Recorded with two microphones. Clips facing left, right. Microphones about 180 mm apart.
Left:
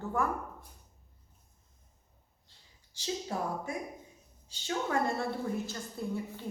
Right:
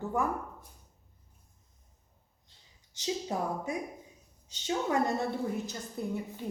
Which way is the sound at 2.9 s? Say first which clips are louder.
Right 2 dB; 20° right (ahead or behind).